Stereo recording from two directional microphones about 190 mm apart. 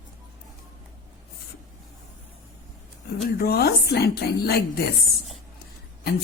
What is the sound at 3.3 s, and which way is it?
A woman's voice, 55° left (ahead or behind).